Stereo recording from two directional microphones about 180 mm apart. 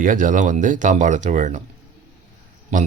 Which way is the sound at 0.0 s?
45° right (ahead or behind).